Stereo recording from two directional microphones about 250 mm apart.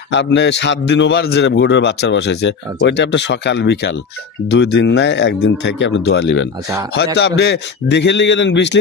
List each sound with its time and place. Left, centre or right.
0.1 s a man's voice: left